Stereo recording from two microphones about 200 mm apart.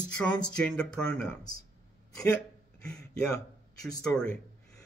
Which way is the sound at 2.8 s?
5° left (ahead or behind).